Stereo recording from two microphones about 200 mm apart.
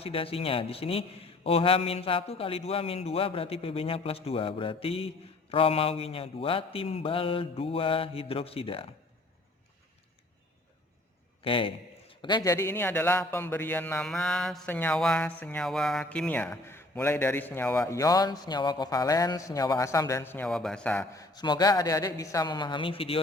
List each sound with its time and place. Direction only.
0.0 s speech: 30° left (ahead or behind)
11.4 s a man's voice: 25° left (ahead or behind); by 21.2 s 10° left (ahead or behind)
21.3 s speech: 20° left (ahead or behind)